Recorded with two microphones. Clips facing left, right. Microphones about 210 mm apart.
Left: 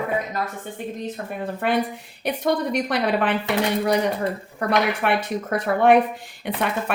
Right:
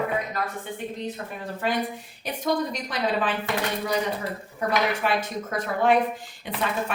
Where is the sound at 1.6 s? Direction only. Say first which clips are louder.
Left 4 dB; 60° left (ahead or behind).